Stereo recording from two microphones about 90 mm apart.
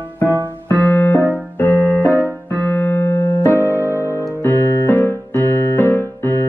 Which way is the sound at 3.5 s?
30° left (ahead or behind).